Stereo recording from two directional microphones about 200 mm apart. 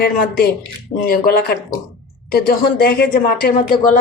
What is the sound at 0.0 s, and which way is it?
Speech, 50° left (ahead or behind).